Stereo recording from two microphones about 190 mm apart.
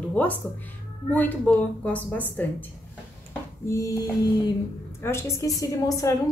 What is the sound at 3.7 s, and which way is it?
A woman's voice, 15° left (ahead or behind).